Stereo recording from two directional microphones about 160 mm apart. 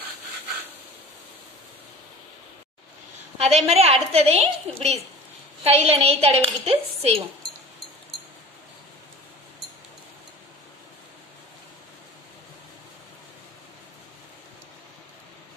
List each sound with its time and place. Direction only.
3.3 s a woman's voice: 40° right (ahead or behind)